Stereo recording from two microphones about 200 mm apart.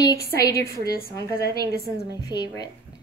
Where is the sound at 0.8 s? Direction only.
50° left (ahead or behind).